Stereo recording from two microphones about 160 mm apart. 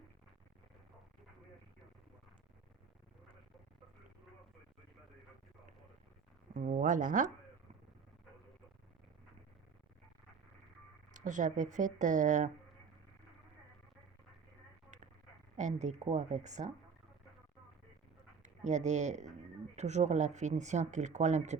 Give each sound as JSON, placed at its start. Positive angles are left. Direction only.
{"t": 6.5, "sound": "speech", "side_deg": -50}
{"t": 11.1, "sound": "speech", "side_deg": -50}
{"t": 15.5, "sound": "speech", "side_deg": -45}
{"t": 18.4, "sound": "speech", "side_deg": -45}